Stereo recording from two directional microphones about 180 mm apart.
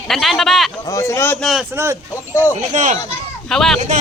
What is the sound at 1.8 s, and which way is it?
Speech, 15° right (ahead or behind).